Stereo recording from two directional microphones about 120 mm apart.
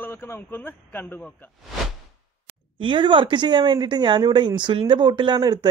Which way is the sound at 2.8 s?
40° right (ahead or behind).